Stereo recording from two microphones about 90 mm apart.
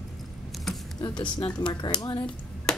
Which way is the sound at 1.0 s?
50° left (ahead or behind).